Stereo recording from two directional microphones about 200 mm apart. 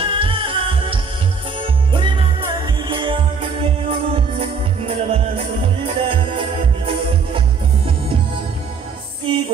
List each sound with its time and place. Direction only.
0.0 s music: 25° right (ahead or behind)